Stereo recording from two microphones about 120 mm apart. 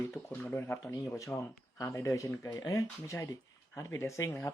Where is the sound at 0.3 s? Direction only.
15° left (ahead or behind).